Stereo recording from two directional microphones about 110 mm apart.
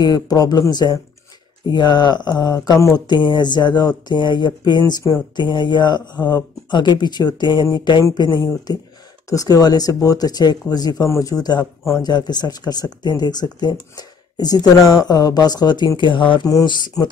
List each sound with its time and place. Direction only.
0.0 s speech: 35° left (ahead or behind)